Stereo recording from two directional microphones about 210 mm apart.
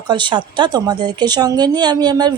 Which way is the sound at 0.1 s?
20° right (ahead or behind).